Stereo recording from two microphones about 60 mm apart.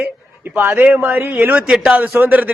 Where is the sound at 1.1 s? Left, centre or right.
Right.